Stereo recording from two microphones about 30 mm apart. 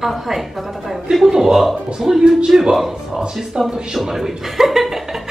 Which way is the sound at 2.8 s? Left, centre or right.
Centre.